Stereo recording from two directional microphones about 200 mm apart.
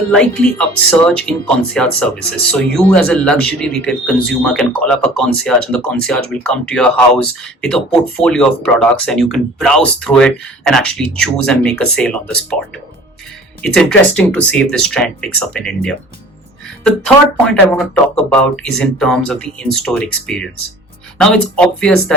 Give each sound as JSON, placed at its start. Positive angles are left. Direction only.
{"t": 0.2, "sound": "speech", "side_deg": 5}
{"t": 17.4, "sound": "speech", "side_deg": 5}